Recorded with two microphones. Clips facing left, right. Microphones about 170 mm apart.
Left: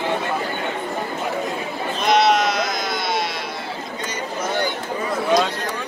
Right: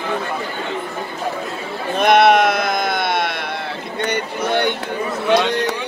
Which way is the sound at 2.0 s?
55° right (ahead or behind).